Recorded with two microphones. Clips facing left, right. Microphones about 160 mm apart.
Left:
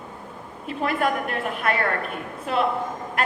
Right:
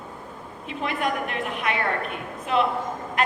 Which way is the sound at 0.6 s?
45° left (ahead or behind).